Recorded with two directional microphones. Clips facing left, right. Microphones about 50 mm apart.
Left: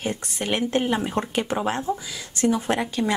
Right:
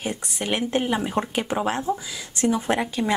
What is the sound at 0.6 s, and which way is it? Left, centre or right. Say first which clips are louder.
Speech: left 1 dB; centre.